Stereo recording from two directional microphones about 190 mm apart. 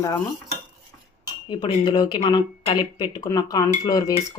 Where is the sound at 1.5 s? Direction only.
20° left (ahead or behind).